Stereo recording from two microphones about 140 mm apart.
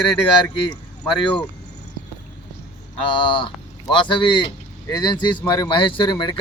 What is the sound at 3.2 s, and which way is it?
Speech, 35° left (ahead or behind).